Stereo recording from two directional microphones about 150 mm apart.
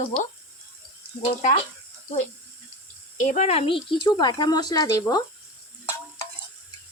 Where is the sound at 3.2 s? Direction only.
55° left (ahead or behind); by 5.2 s 25° left (ahead or behind).